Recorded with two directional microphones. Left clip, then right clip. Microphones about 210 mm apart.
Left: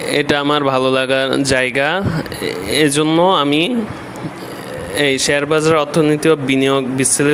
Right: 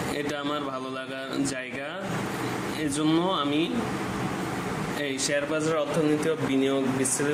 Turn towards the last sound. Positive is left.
turn(degrees=50)  # may be behind; listen again after turning